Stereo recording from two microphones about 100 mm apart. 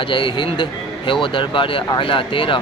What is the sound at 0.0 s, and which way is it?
Speech, 55° left (ahead or behind).